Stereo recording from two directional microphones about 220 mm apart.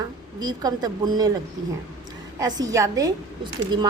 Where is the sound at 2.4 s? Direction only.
15° right (ahead or behind).